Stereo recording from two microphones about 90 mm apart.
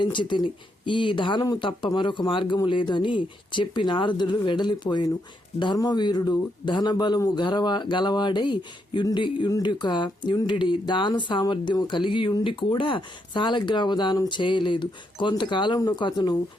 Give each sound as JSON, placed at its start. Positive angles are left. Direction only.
{"t": 0.0, "sound": "speech", "side_deg": 60}
{"t": 15.8, "sound": "speech", "side_deg": 50}